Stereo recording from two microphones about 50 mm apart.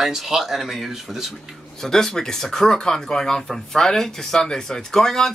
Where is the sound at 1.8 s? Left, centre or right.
Centre.